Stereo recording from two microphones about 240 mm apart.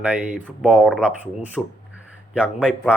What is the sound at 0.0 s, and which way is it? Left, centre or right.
Speech, centre.